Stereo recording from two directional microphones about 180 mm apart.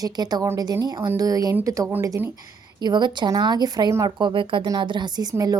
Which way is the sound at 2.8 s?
25° right (ahead or behind).